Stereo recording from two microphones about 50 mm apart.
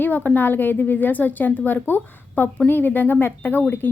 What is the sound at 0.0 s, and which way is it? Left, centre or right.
A woman's voice, left.